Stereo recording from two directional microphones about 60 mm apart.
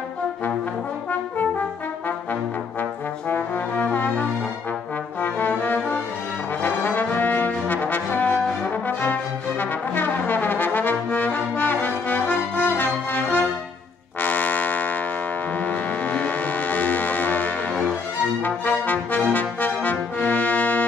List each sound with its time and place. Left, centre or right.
2.8 s trombone: left
6.6 s brass instrument: left
14.2 s music: left
18.4 s brass instrument: left